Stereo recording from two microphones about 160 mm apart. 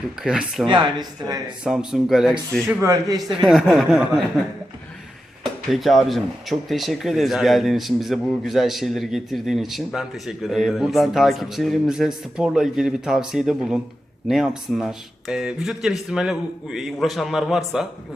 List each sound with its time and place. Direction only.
0.2 s speech: 5° right (ahead or behind)
0.7 s speech: 25° right (ahead or behind)
1.6 s speech: 5° right (ahead or behind)
2.6 s speech: 20° right (ahead or behind)
3.4 s speech: centre (ahead or behind)
5.7 s speech: centre (ahead or behind)